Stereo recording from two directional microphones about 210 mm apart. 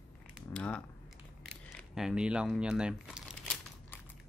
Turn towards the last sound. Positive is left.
turn(degrees=-5)  # may be behind; listen again after turning